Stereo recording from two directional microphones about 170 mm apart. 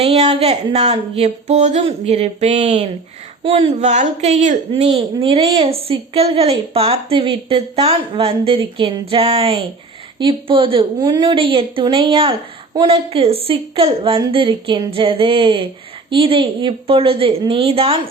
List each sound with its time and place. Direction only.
0.0 s a woman's voice: 40° right (ahead or behind)
12.3 s a woman's voice: 20° right (ahead or behind)
12.9 s a woman's voice: 35° right (ahead or behind)